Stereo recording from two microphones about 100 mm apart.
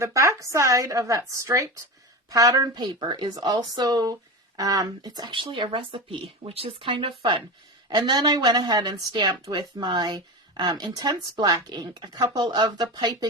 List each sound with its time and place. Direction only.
0.0 s a woman's voice: 30° right (ahead or behind); by 7.4 s 60° right (ahead or behind)
7.9 s a woman's voice: 45° right (ahead or behind)